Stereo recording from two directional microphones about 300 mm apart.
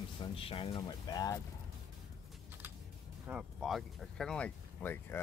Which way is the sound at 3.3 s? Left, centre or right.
Centre.